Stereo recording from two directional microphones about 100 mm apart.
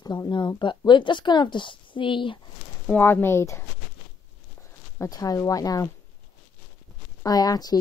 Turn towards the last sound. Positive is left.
turn(degrees=40)  # may be behind; listen again after turning